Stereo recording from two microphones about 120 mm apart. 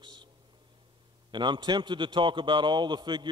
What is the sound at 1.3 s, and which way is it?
A man's voice, 40° right (ahead or behind).